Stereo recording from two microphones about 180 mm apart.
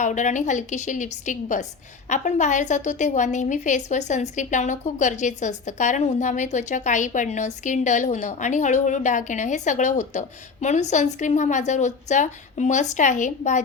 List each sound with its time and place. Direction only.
0.0 s a woman's voice: 45° left (ahead or behind)